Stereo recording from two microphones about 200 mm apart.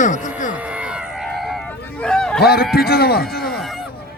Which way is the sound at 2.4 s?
50° left (ahead or behind).